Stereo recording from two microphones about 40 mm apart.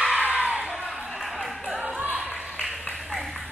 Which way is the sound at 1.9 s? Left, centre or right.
Right.